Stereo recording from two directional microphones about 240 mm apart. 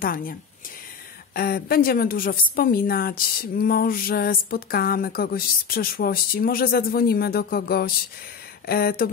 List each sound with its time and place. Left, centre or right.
0.0 s a woman's voice: left